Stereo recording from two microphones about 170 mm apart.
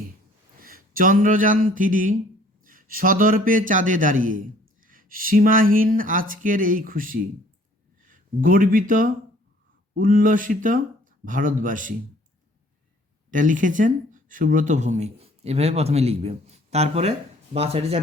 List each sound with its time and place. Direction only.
0.6 s a man's voice: 55° right (ahead or behind)
13.3 s speech: 50° right (ahead or behind)